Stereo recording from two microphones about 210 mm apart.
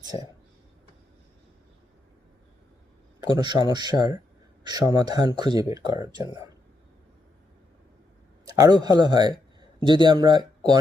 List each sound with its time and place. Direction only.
3.2 s a man's voice: 20° right (ahead or behind)
8.4 s a man's voice: 15° right (ahead or behind)